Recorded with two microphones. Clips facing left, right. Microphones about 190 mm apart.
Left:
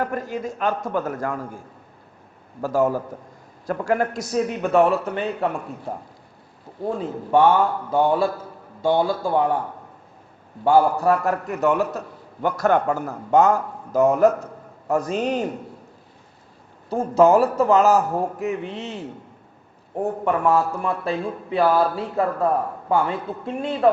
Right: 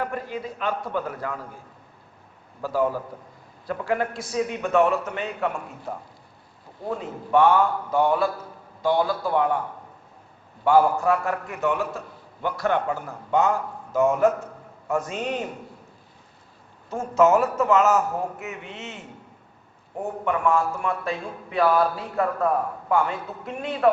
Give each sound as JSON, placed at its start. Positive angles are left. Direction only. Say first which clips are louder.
{"t": 0.0, "sound": "a man's voice", "louder": "left 4 dB", "side_deg": 45}
{"t": 7.0, "sound": "a man's voice", "louder": "left 2 dB", "side_deg": 30}
{"t": 10.6, "sound": "a man's voice", "louder": "left 2 dB", "side_deg": 35}
{"t": 16.9, "sound": "a man's voice", "louder": "left 3 dB", "side_deg": 35}
{"t": 20.2, "sound": "a man's voice", "louder": "left 2 dB", "side_deg": 35}